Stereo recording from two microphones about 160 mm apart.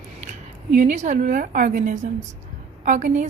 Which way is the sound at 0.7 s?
50° right (ahead or behind).